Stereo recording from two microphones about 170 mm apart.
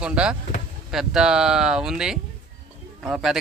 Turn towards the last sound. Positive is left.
turn(degrees=-5)  # may be behind; listen again after turning